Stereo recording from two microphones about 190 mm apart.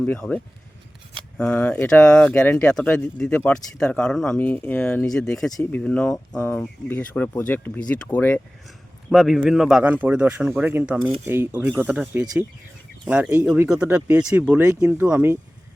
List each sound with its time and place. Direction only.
0.0 s speech: 10° left (ahead or behind)
9.0 s speech: centre (ahead or behind)